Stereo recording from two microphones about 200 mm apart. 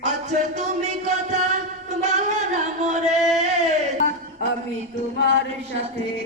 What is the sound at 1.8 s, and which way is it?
Singing, 35° right (ahead or behind).